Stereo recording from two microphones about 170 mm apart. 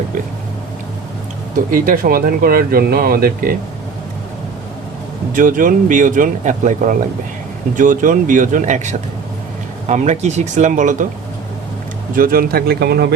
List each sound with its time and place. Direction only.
1.7 s speech: 55° right (ahead or behind)
5.3 s speech: 50° right (ahead or behind)
12.1 s speech: 60° right (ahead or behind)